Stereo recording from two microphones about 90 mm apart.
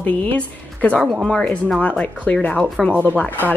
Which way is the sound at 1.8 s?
15° left (ahead or behind).